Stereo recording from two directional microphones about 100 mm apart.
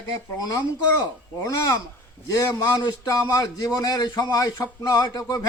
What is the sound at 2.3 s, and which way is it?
A man's voice, 35° left (ahead or behind).